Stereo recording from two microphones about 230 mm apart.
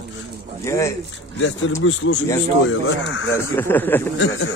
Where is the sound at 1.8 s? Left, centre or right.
Left.